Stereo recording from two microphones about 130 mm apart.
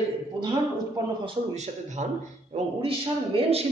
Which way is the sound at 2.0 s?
60° right (ahead or behind).